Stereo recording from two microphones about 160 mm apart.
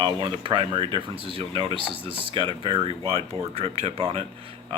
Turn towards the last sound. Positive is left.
turn(degrees=-35)  # may be behind; listen again after turning